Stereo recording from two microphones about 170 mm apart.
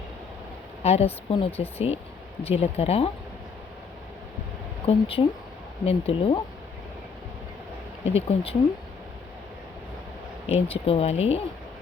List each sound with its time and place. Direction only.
0.8 s speech: 35° left (ahead or behind)
4.9 s speech: 35° left (ahead or behind)
8.0 s speech: 35° left (ahead or behind)
10.5 s speech: 35° left (ahead or behind)